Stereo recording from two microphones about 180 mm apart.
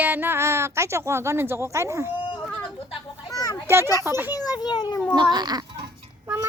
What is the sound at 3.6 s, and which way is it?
Speech, 15° right (ahead or behind).